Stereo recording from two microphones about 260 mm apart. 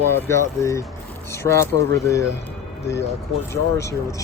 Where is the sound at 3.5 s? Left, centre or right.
Centre.